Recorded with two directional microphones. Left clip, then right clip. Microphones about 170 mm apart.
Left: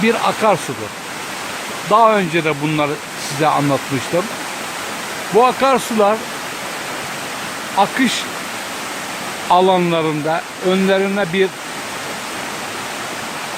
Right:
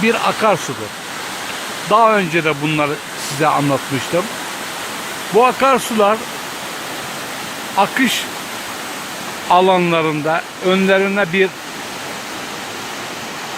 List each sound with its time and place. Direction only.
0.0 s speech: centre (ahead or behind)
1.9 s speech: centre (ahead or behind)
5.3 s speech: centre (ahead or behind)
7.8 s speech: centre (ahead or behind)
9.5 s speech: 5° left (ahead or behind)